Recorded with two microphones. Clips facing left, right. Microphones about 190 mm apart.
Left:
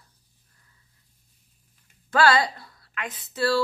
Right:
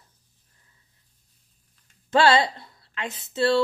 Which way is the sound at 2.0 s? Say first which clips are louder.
Right 2 dB; 25° right (ahead or behind).